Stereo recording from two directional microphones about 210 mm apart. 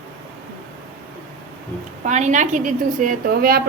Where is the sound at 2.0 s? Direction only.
35° right (ahead or behind).